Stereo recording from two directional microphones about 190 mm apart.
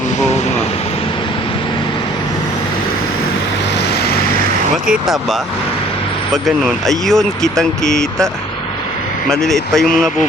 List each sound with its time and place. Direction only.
4.9 s speech: centre (ahead or behind)
9.3 s speech: 5° left (ahead or behind)